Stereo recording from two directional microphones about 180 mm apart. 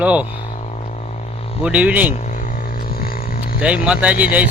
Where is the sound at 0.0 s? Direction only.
10° right (ahead or behind).